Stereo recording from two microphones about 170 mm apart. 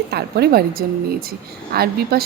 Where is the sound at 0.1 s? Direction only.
70° right (ahead or behind).